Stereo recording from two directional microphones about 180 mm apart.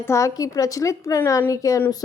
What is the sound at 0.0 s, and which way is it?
A woman's voice, 15° left (ahead or behind).